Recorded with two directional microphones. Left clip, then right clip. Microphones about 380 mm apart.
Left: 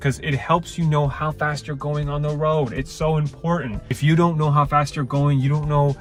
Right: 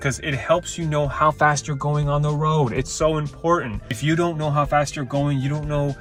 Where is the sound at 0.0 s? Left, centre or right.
Centre.